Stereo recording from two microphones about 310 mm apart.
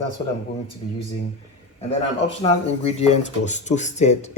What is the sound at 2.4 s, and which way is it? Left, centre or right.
Speech, centre.